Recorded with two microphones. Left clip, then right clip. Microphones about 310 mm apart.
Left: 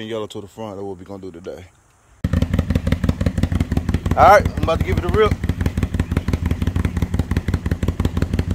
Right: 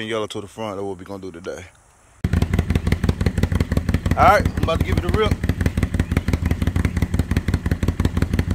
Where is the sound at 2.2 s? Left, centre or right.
Centre.